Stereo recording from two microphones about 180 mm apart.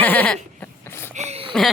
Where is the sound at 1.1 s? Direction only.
40° right (ahead or behind).